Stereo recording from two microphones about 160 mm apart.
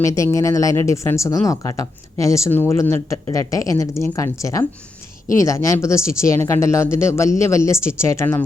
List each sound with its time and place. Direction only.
0.0 s speech: 20° left (ahead or behind)